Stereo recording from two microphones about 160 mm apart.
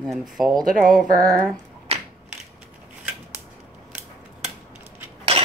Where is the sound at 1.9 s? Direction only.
40° right (ahead or behind).